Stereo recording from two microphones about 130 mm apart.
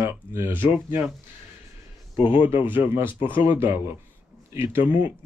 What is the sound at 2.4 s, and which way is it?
Speech, 15° right (ahead or behind).